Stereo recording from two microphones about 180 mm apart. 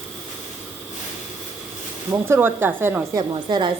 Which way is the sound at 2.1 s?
15° right (ahead or behind).